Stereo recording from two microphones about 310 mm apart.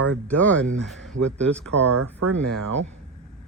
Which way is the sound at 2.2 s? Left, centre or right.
Right.